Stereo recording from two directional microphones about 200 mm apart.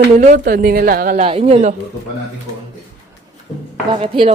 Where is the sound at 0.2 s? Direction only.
40° right (ahead or behind).